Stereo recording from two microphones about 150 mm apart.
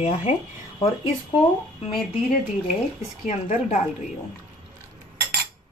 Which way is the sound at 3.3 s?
50° left (ahead or behind).